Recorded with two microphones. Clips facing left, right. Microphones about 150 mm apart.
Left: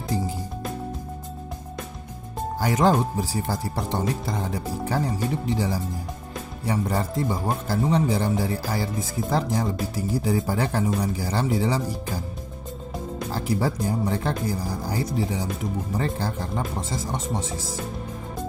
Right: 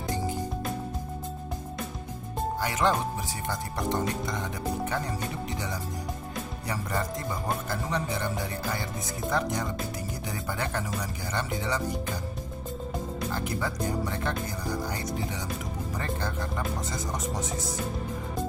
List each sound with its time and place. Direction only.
2.6 s speech: 40° left (ahead or behind)
13.3 s speech: 30° left (ahead or behind)